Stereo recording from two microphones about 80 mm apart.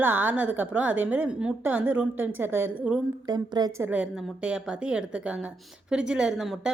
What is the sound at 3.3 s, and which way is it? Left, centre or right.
Speech, right.